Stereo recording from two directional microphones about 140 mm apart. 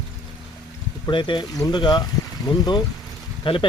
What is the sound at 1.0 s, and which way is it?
Speech, 35° left (ahead or behind).